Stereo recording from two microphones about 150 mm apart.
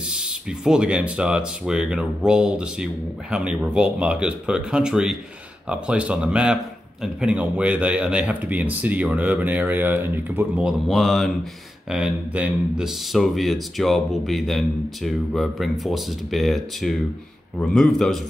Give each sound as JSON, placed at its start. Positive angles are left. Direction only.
{"t": 0.1, "sound": "a man's voice", "side_deg": -5}